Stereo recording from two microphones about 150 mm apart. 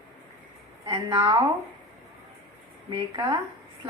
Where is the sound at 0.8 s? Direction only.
30° right (ahead or behind).